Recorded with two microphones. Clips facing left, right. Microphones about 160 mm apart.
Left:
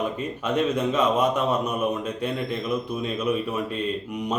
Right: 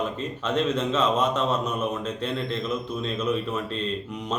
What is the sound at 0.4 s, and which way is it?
Speech, 10° left (ahead or behind).